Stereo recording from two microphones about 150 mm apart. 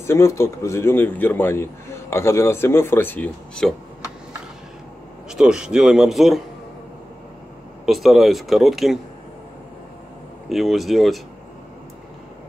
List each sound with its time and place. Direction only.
0.0 s speech: 20° left (ahead or behind)
5.3 s speech: 5° right (ahead or behind)
7.8 s speech: centre (ahead or behind)
10.5 s speech: centre (ahead or behind)